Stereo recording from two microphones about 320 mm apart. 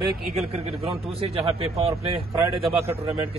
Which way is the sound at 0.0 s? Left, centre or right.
Centre.